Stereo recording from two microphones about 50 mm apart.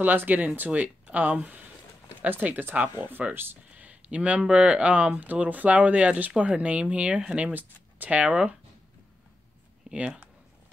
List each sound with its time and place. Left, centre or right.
0.0 s speech: right
0.7 s speech: right
2.7 s speech: right
3.1 s speech: right
3.7 s speech: right
9.9 s speech: right